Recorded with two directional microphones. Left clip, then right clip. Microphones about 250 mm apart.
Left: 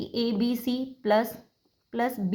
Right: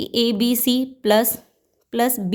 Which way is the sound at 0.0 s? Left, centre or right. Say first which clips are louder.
Right 8 dB; right.